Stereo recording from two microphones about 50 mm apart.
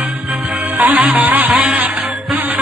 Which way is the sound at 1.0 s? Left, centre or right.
Right.